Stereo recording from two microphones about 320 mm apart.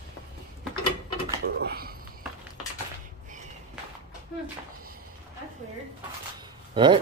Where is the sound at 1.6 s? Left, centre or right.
Right.